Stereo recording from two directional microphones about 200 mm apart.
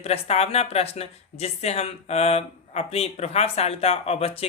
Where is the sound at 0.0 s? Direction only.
30° left (ahead or behind).